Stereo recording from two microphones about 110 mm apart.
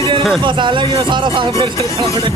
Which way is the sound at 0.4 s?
45° right (ahead or behind).